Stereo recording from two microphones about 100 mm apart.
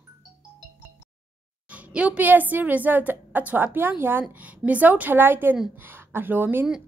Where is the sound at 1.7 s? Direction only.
15° right (ahead or behind).